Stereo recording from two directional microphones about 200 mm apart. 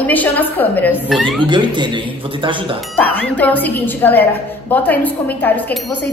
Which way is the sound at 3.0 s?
10° left (ahead or behind).